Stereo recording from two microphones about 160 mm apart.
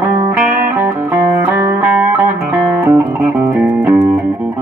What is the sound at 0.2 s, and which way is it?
Music, 15° right (ahead or behind).